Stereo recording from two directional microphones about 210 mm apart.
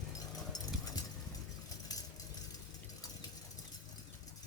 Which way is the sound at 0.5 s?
15° left (ahead or behind).